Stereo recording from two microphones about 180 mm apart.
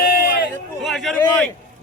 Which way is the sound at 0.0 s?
55° left (ahead or behind).